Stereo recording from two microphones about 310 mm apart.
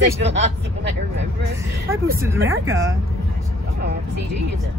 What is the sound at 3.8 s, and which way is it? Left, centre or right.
Speech, right.